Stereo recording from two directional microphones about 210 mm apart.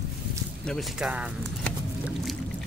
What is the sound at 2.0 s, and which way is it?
Music, centre (ahead or behind).